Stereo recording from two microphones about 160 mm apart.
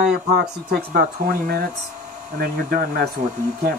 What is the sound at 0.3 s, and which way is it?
Speech, 90° right.